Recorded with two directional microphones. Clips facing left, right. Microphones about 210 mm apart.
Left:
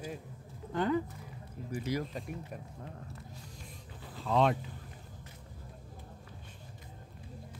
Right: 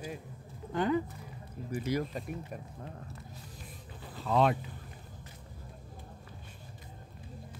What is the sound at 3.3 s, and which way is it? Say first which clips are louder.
Music: right 1 dB; 5° right (ahead or behind).